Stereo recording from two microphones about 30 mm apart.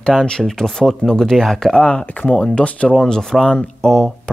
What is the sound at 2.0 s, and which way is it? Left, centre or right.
Speech, left.